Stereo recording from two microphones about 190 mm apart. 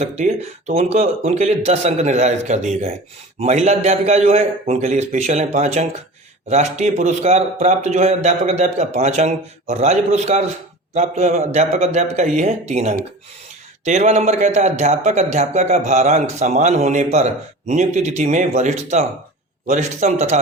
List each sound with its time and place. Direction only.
0.0 s a man's voice: 35° right (ahead or behind)